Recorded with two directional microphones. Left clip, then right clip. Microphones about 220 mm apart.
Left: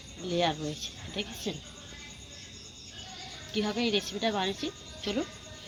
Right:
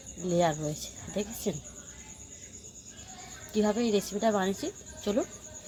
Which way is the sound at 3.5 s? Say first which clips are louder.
Right 2 dB; 50° right (ahead or behind).